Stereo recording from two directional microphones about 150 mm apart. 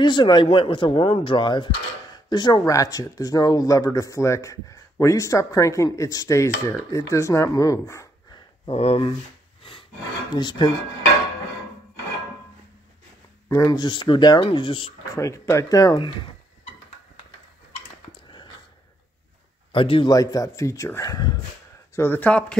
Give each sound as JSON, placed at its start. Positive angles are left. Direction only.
{"t": 0.0, "sound": "speech", "side_deg": 30}
{"t": 8.6, "sound": "speech", "side_deg": 40}
{"t": 10.3, "sound": "speech", "side_deg": 30}
{"t": 13.5, "sound": "speech", "side_deg": 20}
{"t": 15.1, "sound": "speech", "side_deg": 20}
{"t": 19.7, "sound": "speech", "side_deg": 35}
{"t": 21.9, "sound": "speech", "side_deg": 15}